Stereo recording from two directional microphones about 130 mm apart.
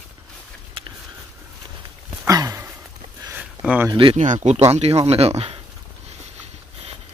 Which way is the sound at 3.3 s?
10° right (ahead or behind).